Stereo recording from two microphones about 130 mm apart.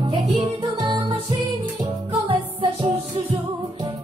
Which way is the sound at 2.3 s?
45° right (ahead or behind).